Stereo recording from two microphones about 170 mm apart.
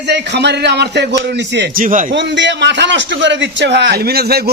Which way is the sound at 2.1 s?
90° right.